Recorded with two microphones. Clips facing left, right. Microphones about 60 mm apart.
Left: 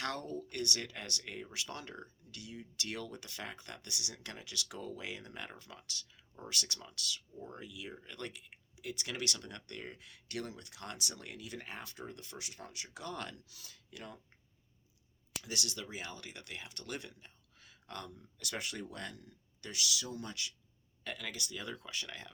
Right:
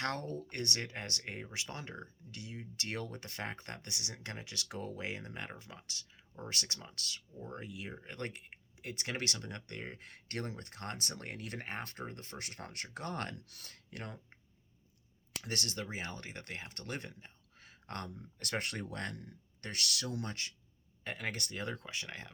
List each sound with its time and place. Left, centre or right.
0.0 s speech: right
10.0 s speech: right
15.4 s speech: right
21.0 s speech: right
21.2 s speech: right
21.8 s speech: right